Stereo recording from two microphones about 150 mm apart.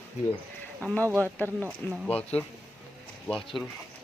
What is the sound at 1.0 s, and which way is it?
Speech, 15° right (ahead or behind).